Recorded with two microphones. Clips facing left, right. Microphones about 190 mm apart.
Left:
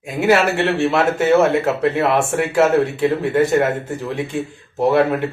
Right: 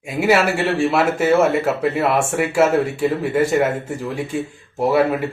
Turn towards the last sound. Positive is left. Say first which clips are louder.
# left 1 dB
turn(degrees=-5)  # may be behind; listen again after turning